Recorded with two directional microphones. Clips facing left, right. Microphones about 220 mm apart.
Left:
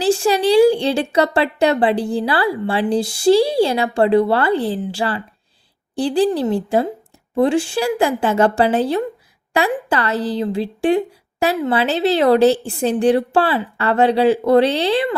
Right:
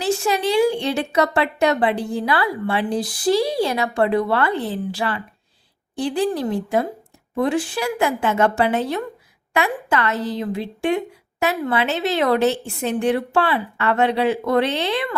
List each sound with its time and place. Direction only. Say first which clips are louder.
0.0 s a woman's voice: left 5 dB; 30° left (ahead or behind)